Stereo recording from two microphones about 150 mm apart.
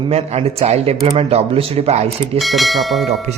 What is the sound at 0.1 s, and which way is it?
Speech, 45° right (ahead or behind).